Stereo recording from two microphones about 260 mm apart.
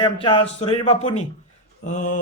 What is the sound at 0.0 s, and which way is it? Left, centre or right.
Speech, centre.